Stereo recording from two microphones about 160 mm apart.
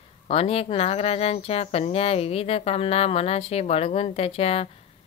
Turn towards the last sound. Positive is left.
turn(degrees=40)  # may be behind; listen again after turning